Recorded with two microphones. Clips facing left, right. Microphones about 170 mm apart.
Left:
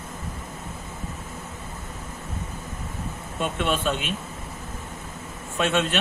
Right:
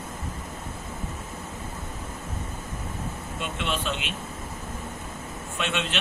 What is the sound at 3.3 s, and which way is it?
Speech, 50° left (ahead or behind).